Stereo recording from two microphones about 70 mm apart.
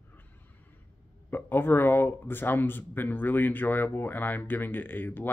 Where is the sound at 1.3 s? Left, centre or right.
Left.